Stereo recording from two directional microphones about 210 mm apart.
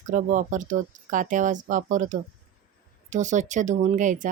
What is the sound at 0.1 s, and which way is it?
Speech, 35° right (ahead or behind).